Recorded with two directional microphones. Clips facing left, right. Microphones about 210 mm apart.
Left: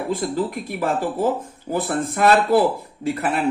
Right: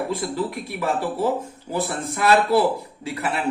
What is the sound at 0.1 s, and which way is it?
Speech, 50° left (ahead or behind).